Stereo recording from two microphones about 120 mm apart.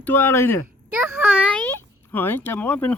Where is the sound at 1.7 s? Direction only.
15° left (ahead or behind).